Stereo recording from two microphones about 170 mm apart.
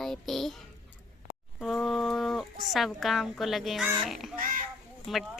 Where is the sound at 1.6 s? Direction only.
Centre (ahead or behind).